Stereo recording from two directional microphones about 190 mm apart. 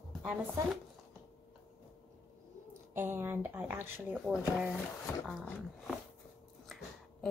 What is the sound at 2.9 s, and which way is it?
A woman's voice, 10° right (ahead or behind).